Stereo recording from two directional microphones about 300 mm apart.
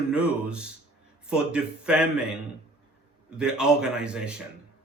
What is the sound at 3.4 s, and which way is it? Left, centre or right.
Speech, centre.